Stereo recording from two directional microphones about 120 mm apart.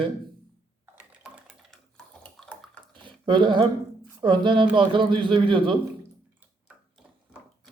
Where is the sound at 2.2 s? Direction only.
10° left (ahead or behind).